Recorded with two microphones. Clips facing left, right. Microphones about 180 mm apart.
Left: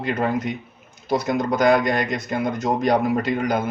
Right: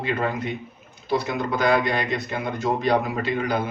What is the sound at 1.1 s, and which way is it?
A man's voice, 45° left (ahead or behind).